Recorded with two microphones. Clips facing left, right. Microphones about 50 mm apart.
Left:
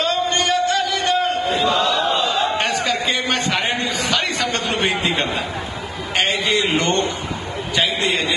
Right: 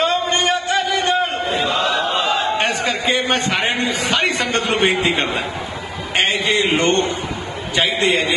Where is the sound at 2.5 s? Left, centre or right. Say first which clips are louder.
Right 1 dB; right.